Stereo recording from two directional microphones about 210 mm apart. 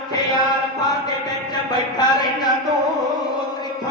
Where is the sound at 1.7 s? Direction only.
20° left (ahead or behind).